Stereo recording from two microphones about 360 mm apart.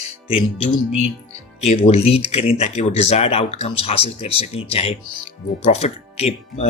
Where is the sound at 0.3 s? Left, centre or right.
Centre.